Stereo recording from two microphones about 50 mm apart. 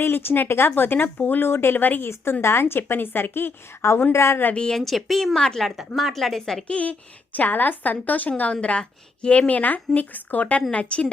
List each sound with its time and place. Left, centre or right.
0.0 s a woman's voice: left
1.5 s a woman's voice: left
2.4 s a woman's voice: left
4.1 s a woman's voice: left
4.5 s speech: centre
4.8 s a woman's voice: centre
5.4 s speech: centre
6.0 s a woman's voice: centre
6.7 s a woman's voice: left
7.3 s a woman's voice: left; by 9.5 s centre
9.5 s a woman's voice: left